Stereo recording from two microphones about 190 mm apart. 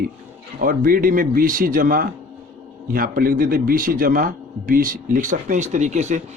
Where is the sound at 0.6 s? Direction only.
50° right (ahead or behind).